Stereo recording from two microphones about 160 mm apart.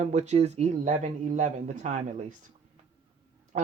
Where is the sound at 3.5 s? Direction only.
45° right (ahead or behind).